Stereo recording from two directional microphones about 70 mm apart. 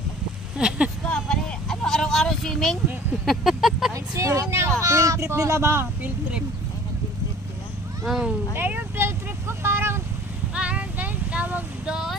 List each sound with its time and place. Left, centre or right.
0.6 s speech: centre
1.0 s a sound: centre
3.9 s speech: right
8.0 s speech: centre
8.5 s vehicle: right
9.6 s a sound: right
10.5 s music: centre
11.9 s speech: centre